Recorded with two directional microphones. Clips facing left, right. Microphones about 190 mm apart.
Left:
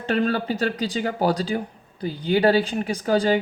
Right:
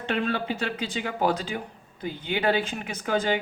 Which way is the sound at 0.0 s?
40° left (ahead or behind).